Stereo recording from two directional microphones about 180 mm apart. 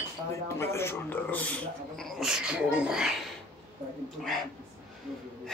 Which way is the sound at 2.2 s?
5° right (ahead or behind).